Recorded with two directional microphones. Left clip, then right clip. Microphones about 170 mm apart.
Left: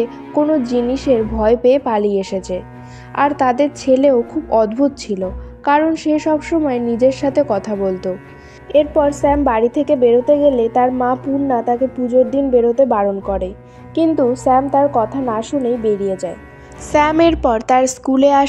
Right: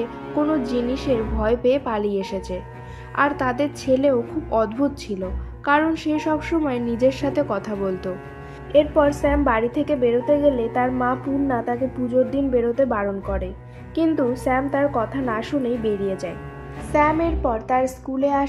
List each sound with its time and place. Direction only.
0.0 s a woman's voice: 25° left (ahead or behind)
16.9 s a woman's voice: 55° left (ahead or behind)